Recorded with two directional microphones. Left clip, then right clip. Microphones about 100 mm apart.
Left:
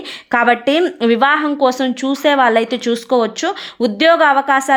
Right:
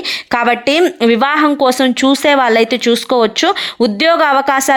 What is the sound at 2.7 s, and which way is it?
Speech, 20° right (ahead or behind).